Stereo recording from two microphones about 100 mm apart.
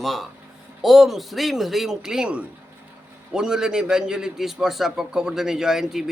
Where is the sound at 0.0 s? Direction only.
Centre (ahead or behind).